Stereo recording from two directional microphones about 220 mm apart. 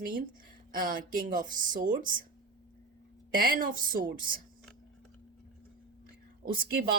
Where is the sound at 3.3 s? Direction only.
40° right (ahead or behind).